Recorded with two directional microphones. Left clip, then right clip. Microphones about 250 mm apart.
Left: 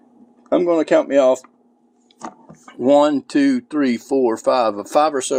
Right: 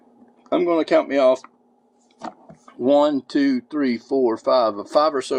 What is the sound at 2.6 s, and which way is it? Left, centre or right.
Speech, left.